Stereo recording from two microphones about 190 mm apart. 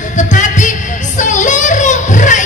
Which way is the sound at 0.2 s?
40° left (ahead or behind).